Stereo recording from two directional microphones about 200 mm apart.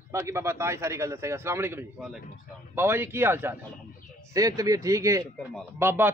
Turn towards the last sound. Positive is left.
turn(degrees=-10)  # may be behind; listen again after turning